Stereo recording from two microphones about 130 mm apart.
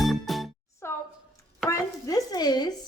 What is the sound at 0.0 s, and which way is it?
Music, centre (ahead or behind).